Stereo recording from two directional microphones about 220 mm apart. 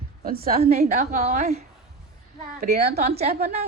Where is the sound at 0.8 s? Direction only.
30° right (ahead or behind).